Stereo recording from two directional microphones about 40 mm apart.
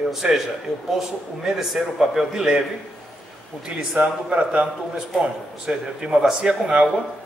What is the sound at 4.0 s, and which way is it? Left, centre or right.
A man's voice, right.